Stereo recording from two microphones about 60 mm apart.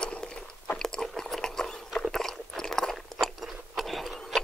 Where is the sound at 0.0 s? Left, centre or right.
Centre.